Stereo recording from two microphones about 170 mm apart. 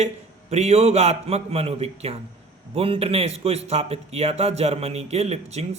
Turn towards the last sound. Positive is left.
turn(degrees=-40)  # may be behind; listen again after turning